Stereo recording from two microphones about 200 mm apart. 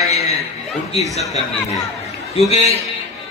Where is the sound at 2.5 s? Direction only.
35° left (ahead or behind).